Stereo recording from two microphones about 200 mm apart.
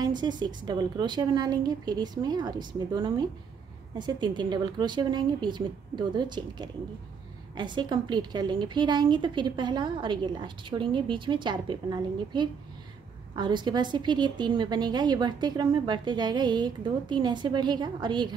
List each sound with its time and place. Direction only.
0.0 s a woman's voice: 20° right (ahead or behind)